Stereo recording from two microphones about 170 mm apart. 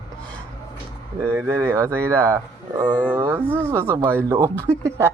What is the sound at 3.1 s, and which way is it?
Speech, 15° right (ahead or behind).